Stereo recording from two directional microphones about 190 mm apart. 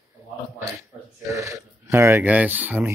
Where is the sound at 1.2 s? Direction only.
15° right (ahead or behind).